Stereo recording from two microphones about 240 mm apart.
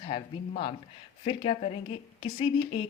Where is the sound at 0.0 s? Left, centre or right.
Left.